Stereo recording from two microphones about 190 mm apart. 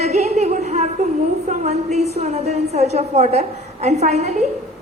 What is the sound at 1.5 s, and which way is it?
A woman's voice, 35° right (ahead or behind).